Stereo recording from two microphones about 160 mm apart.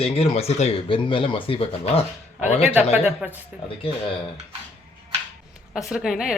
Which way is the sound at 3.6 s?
35° left (ahead or behind).